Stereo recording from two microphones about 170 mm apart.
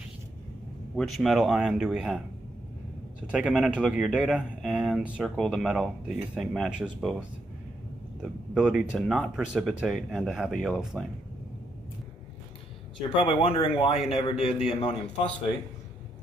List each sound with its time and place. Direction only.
0.9 s speech: centre (ahead or behind)
3.3 s speech: 5° right (ahead or behind)
13.2 s a man's voice: 30° left (ahead or behind)